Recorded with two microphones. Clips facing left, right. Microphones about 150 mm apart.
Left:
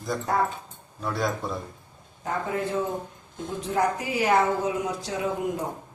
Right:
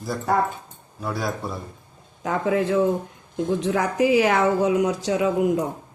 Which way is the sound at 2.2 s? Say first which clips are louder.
Right 6 dB; 90° right.